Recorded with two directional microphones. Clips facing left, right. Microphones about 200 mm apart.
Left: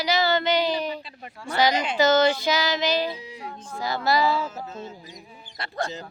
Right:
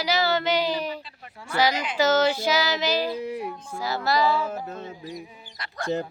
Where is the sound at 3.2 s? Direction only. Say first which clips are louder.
Right 11 dB; 60° right (ahead or behind).